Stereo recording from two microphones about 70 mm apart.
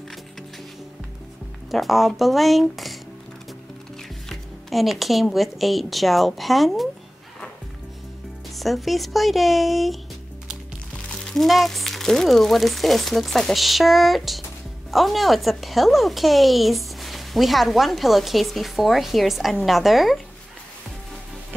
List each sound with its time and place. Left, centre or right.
1.7 s a woman's voice: centre
4.3 s a woman's voice: centre
8.5 s a woman's voice: centre
11.1 s a woman's voice: centre